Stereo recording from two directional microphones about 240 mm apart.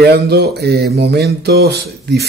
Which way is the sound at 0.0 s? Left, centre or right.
Right.